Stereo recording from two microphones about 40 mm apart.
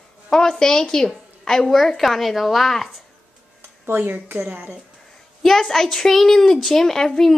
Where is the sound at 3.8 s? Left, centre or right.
Right.